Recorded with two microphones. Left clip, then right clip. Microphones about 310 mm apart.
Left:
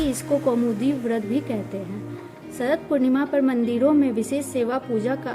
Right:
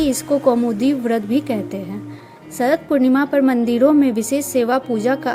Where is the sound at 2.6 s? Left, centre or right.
Centre.